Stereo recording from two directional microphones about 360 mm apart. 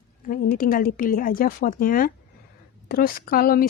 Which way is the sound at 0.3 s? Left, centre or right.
Left.